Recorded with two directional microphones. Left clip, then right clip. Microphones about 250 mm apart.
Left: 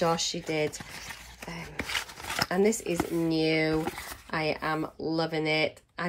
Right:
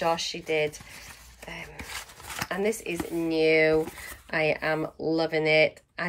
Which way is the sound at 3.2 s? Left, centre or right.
Centre.